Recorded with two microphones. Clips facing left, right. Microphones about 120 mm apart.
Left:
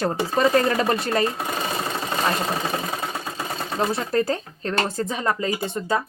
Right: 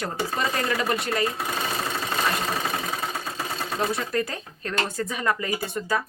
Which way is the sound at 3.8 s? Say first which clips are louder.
Left 4 dB; 30° left (ahead or behind).